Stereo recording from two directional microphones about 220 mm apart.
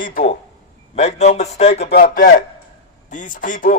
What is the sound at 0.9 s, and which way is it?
Speech, 30° left (ahead or behind).